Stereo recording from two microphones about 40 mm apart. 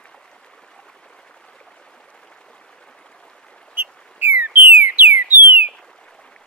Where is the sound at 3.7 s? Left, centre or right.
Right.